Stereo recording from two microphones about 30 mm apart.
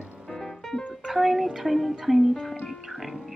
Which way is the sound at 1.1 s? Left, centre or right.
Centre.